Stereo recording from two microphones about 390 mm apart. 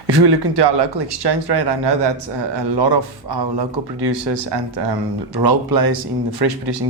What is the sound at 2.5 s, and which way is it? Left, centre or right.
A man's voice, right.